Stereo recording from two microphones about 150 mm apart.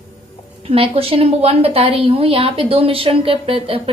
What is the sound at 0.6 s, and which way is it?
A woman's voice, 40° right (ahead or behind).